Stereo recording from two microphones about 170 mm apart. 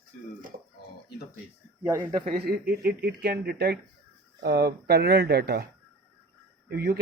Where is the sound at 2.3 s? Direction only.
65° right (ahead or behind).